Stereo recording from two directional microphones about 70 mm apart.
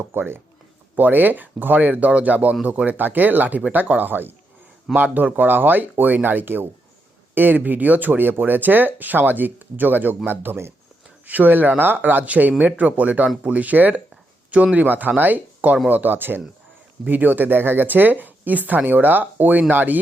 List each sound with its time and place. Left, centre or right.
0.0 s speech: right